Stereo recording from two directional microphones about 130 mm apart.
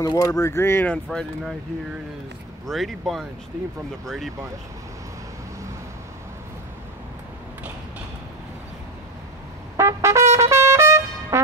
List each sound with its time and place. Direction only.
0.0 s speech: 25° left (ahead or behind)
0.9 s speech: 5° left (ahead or behind)
2.6 s speech: centre (ahead or behind)
9.8 s trumpet: 20° right (ahead or behind)